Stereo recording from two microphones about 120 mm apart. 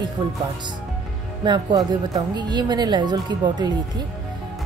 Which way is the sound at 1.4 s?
35° right (ahead or behind).